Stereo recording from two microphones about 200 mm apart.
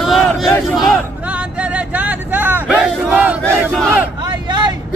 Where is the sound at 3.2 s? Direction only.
10° right (ahead or behind).